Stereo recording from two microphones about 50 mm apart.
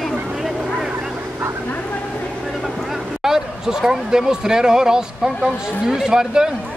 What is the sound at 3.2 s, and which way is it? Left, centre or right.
Speech, centre.